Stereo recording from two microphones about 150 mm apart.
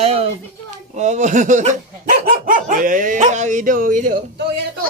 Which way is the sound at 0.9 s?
50° right (ahead or behind).